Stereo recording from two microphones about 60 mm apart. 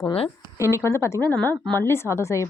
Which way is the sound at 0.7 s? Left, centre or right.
Left.